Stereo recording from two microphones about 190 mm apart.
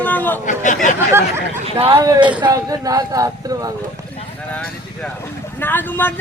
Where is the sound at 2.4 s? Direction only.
20° right (ahead or behind).